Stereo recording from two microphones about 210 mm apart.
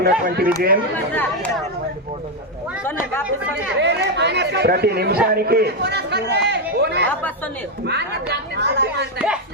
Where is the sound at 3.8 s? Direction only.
55° right (ahead or behind).